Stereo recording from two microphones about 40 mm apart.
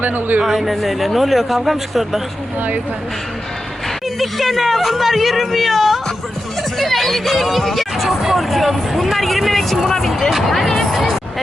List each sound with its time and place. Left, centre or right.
0.0 s speech: right
0.4 s speech: centre
4.2 s speech: centre
10.9 s music: centre